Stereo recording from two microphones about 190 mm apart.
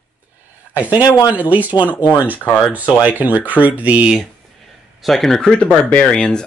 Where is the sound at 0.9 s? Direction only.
20° left (ahead or behind).